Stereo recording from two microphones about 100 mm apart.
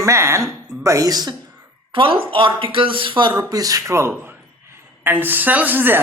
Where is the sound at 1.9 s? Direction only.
60° right (ahead or behind).